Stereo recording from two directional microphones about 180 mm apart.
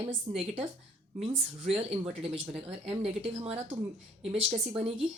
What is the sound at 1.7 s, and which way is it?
Speech, 35° right (ahead or behind).